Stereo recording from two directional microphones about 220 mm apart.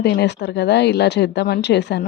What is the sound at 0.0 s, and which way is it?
Dishes, 50° left (ahead or behind).